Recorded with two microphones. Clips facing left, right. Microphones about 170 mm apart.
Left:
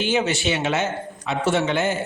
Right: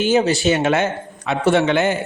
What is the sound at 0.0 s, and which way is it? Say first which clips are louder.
A man's voice: right 6 dB; 40° right (ahead or behind).